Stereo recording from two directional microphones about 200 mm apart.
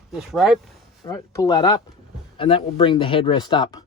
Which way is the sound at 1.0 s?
15° left (ahead or behind).